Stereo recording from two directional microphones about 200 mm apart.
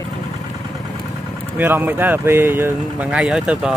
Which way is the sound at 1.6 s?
10° right (ahead or behind).